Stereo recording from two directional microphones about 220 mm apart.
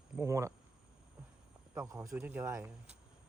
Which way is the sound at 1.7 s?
10° right (ahead or behind).